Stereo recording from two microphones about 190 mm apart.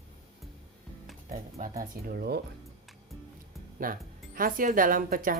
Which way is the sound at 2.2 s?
55° right (ahead or behind).